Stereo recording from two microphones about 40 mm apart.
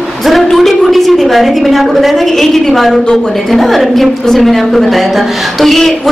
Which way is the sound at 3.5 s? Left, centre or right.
Centre.